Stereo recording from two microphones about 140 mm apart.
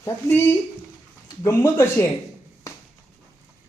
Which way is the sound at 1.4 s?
20° left (ahead or behind).